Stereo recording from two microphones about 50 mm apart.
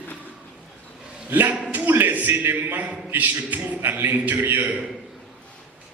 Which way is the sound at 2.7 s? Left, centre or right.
Right.